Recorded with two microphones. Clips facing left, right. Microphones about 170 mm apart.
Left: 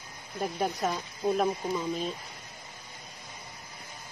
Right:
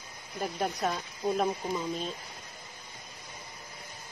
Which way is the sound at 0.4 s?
Centre (ahead or behind).